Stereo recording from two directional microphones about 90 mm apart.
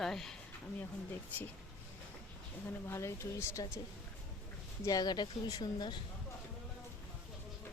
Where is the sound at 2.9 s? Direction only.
30° left (ahead or behind).